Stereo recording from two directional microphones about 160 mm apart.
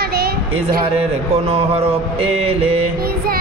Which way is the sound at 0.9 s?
40° right (ahead or behind).